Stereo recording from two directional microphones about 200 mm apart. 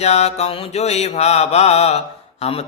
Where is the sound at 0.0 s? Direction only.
35° left (ahead or behind).